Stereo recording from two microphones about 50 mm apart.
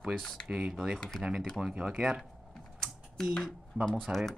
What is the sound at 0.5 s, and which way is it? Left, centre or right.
Speech, centre.